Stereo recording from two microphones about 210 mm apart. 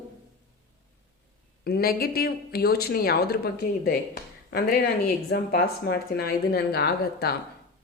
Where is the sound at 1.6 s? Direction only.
45° left (ahead or behind).